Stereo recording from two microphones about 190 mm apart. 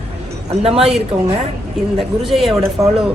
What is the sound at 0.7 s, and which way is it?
Speech, 30° right (ahead or behind).